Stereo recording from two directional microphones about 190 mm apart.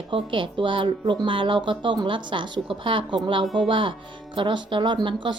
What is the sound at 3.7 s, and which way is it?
A woman's voice, 25° right (ahead or behind).